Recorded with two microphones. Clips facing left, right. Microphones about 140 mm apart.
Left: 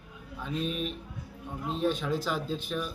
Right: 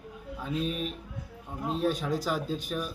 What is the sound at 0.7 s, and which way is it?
A man's voice, 40° right (ahead or behind).